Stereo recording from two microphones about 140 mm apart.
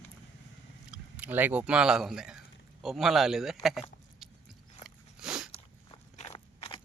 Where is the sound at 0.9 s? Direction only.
10° right (ahead or behind).